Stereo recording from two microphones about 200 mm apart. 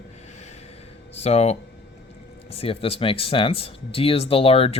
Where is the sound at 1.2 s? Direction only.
30° left (ahead or behind).